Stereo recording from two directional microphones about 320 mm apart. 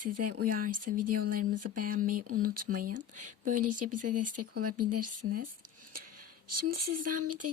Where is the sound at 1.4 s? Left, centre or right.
Right.